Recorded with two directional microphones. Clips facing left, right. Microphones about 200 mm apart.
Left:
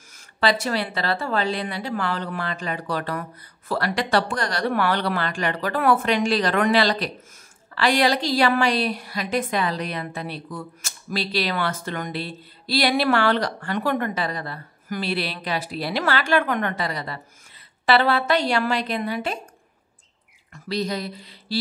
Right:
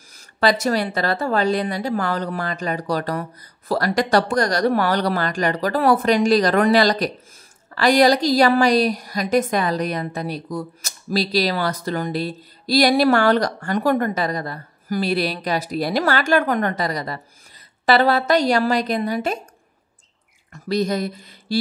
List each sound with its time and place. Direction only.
0.1 s a woman's voice: 40° right (ahead or behind)
20.5 s speech: 45° right (ahead or behind)